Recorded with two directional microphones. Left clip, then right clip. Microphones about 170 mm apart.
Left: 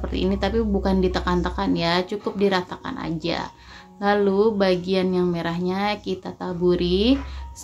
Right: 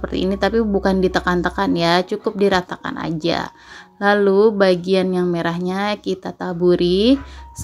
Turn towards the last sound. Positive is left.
turn(degrees=-40)  # may be behind; listen again after turning